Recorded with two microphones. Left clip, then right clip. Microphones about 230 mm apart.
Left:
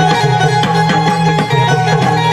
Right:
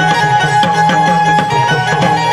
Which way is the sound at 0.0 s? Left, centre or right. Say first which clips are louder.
Right 1 dB; right.